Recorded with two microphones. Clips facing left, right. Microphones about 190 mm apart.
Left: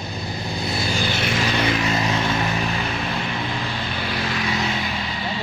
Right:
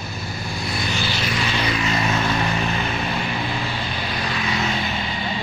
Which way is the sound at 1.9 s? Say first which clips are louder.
Even; 25° left (ahead or behind).